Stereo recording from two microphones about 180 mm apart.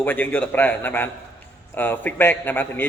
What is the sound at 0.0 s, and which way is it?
A man's voice, 10° left (ahead or behind).